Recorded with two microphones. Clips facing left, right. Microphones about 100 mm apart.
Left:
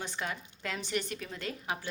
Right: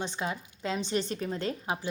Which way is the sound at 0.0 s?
20° right (ahead or behind).